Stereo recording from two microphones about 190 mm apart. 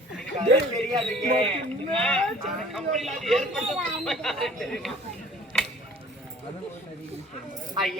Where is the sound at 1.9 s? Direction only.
5° left (ahead or behind).